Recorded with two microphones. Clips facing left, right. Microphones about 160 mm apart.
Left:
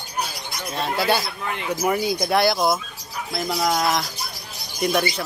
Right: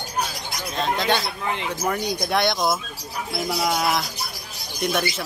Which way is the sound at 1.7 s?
5° left (ahead or behind).